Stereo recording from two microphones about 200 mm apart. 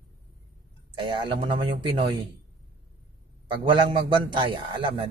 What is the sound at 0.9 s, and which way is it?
Speech, 25° right (ahead or behind).